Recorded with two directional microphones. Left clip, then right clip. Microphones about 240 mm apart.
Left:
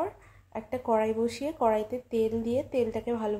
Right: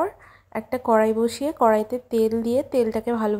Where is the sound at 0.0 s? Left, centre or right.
Right.